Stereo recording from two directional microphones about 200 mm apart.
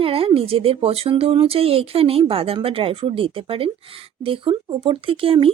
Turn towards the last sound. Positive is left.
turn(degrees=-25)  # may be behind; listen again after turning